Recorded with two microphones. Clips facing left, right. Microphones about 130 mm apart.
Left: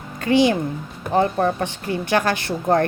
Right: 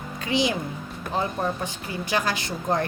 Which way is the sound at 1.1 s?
65° left (ahead or behind).